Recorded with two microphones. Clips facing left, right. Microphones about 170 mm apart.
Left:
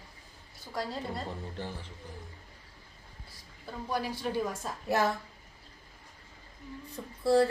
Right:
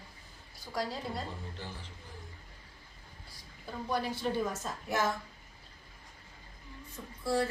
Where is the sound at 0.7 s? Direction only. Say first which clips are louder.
Left 1 dB; centre (ahead or behind).